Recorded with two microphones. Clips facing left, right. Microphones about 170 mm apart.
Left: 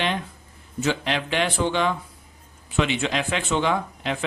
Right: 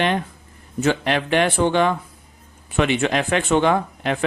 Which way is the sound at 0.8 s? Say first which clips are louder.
Right 5 dB; 55° right (ahead or behind).